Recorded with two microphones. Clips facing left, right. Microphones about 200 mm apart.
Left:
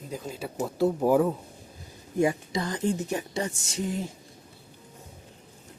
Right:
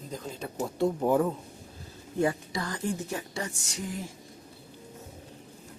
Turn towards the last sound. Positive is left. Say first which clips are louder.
# left 5 dB
turn(degrees=25)  # may be behind; listen again after turning